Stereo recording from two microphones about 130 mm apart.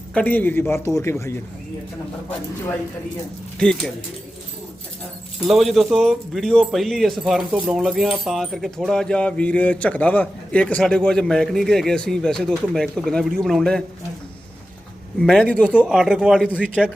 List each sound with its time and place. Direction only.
0.1 s speech: 10° left (ahead or behind)
3.6 s speech: 5° left (ahead or behind)
5.5 s speech: centre (ahead or behind)
15.2 s speech: 5° left (ahead or behind)
15.7 s speech: 5° right (ahead or behind)